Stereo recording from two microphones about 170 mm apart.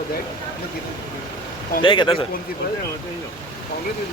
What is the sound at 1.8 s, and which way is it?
Speech, 30° left (ahead or behind).